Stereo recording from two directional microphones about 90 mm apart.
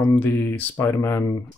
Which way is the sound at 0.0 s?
30° left (ahead or behind).